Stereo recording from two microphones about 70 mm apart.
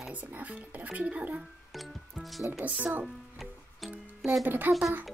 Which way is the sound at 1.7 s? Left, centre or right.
Centre.